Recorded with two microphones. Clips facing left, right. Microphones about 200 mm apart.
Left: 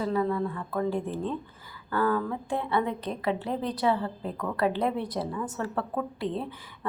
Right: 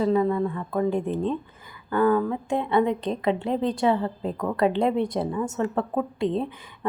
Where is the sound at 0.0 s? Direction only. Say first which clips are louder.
Right 5 dB; 20° right (ahead or behind).